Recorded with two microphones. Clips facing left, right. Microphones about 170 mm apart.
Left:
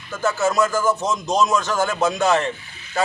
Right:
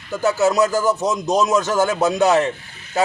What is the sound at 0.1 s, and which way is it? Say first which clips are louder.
A man's voice: right 4 dB; 20° right (ahead or behind).